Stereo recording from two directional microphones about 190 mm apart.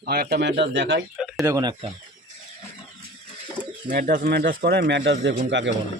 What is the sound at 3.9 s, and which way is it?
A man's voice, 50° right (ahead or behind).